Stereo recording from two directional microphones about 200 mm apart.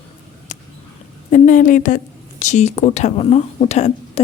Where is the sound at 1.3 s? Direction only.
40° left (ahead or behind).